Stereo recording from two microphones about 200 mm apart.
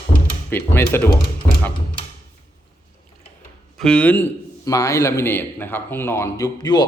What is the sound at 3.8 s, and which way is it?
A man's voice, 5° left (ahead or behind).